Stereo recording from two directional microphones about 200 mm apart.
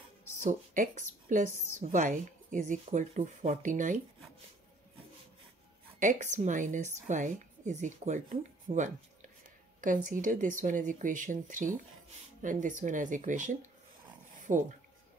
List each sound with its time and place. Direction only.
0.4 s a woman's voice: 40° right (ahead or behind)
5.9 s a woman's voice: 40° right (ahead or behind)